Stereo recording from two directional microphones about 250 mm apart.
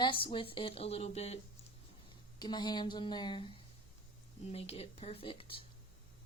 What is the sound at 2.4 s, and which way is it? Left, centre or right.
Speech, centre.